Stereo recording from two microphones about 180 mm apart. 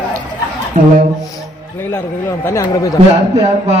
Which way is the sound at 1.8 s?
10° left (ahead or behind).